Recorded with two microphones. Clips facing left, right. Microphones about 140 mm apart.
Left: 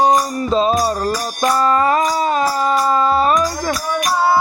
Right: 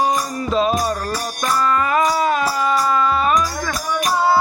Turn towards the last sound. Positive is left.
turn(degrees=35)  # may be behind; listen again after turning